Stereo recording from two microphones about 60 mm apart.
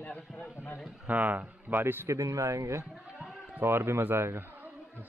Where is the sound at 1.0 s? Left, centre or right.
Right.